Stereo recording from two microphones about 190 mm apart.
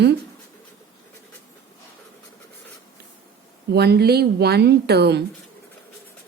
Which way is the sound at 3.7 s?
60° right (ahead or behind).